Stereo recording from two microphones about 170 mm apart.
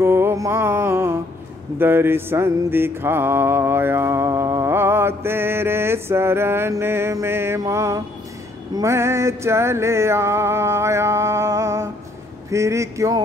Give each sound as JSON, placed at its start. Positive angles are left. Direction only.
{"t": 0.0, "sound": "music", "side_deg": -15}
{"t": 1.8, "sound": "mantra", "side_deg": -15}
{"t": 8.7, "sound": "music", "side_deg": -15}
{"t": 12.4, "sound": "speech", "side_deg": -15}